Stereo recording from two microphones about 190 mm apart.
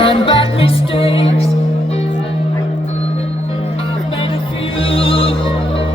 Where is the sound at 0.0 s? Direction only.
30° left (ahead or behind).